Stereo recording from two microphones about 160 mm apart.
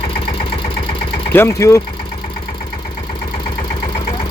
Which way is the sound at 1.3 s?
15° left (ahead or behind).